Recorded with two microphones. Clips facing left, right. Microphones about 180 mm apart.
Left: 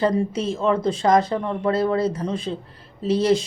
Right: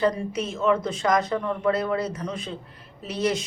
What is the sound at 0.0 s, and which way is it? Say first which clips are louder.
Speech: left 3 dB; 30° left (ahead or behind).